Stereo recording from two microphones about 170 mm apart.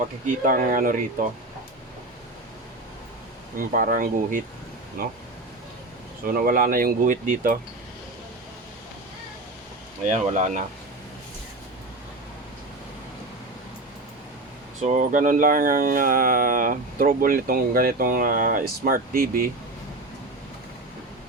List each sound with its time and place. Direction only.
0.3 s speech: 55° right (ahead or behind)
3.6 s speech: 55° right (ahead or behind)
6.2 s speech: 60° right (ahead or behind)
10.1 s speech: 45° right (ahead or behind)
14.8 s speech: 45° right (ahead or behind)